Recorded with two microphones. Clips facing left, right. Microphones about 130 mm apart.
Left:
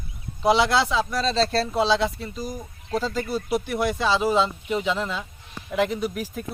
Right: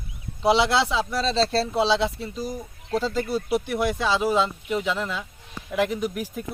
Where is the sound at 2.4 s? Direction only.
15° left (ahead or behind).